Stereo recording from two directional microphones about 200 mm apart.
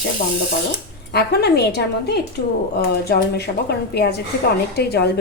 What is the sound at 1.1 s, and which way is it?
A woman's voice, 55° left (ahead or behind).